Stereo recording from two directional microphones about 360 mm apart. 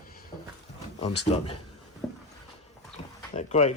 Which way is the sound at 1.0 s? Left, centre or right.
Left.